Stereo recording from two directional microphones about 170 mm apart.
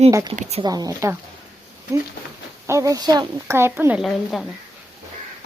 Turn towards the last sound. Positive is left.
turn(degrees=0)  # may be behind; listen again after turning